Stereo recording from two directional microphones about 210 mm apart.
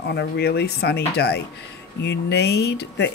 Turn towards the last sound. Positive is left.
turn(degrees=55)  # may be behind; listen again after turning